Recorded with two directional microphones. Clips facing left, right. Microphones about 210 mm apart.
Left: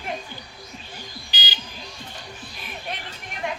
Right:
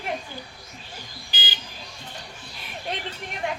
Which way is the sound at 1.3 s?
50° right (ahead or behind).